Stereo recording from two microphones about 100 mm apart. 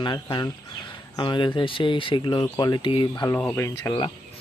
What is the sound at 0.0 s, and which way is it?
Speech, 50° left (ahead or behind).